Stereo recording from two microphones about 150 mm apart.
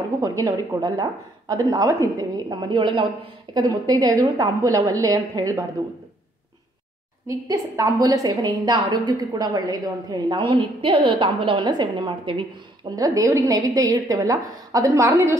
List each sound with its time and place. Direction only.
0.2 s a woman's voice: 25° right (ahead or behind)
7.2 s a woman's voice: 20° right (ahead or behind)